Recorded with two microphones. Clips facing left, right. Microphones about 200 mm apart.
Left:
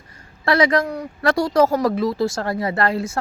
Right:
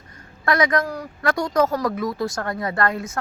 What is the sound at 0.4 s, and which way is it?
Speech, 30° left (ahead or behind).